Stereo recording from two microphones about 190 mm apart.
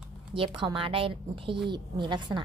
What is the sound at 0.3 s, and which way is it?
Speech, 25° right (ahead or behind).